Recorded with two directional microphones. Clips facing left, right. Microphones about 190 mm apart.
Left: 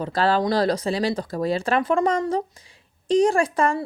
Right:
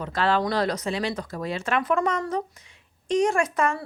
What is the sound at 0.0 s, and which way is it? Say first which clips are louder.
A woman's voice: left 3 dB; 35° left (ahead or behind).